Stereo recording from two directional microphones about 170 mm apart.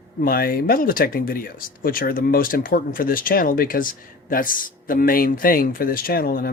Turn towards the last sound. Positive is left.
turn(degrees=60)  # may be behind; listen again after turning